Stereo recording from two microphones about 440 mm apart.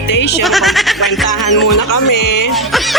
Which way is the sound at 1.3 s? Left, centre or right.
Left.